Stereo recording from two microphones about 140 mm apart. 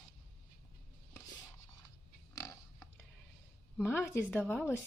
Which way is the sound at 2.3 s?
25° left (ahead or behind).